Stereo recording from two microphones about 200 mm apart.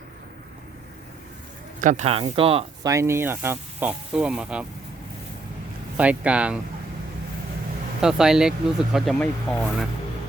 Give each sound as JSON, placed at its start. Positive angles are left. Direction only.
{"t": 1.8, "sound": "speech", "side_deg": -40}
{"t": 2.8, "sound": "speech", "side_deg": -15}
{"t": 6.0, "sound": "speech", "side_deg": -5}
{"t": 8.0, "sound": "speech", "side_deg": -5}